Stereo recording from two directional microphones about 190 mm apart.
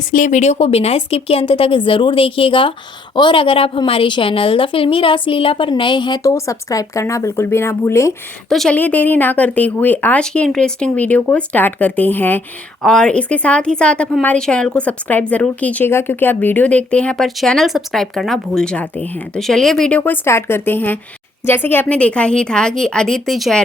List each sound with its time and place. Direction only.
0.1 s a woman's voice: 45° left (ahead or behind); by 8.1 s 15° left (ahead or behind)
8.4 s a woman's voice: centre (ahead or behind)